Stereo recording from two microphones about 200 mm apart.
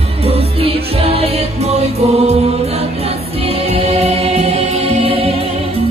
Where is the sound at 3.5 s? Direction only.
30° right (ahead or behind).